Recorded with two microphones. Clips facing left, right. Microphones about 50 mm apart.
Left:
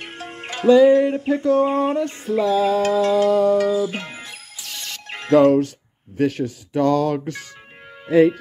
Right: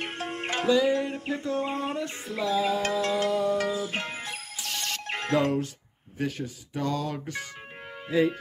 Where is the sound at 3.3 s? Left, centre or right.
Left.